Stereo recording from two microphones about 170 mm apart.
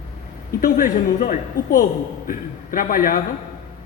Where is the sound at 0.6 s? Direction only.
55° left (ahead or behind).